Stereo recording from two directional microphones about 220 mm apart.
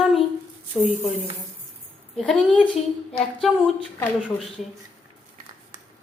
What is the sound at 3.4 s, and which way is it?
Speech, centre (ahead or behind).